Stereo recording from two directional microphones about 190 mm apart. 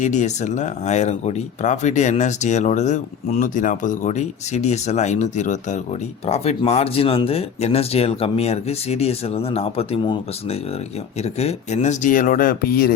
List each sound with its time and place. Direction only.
0.0 s speech: 40° left (ahead or behind)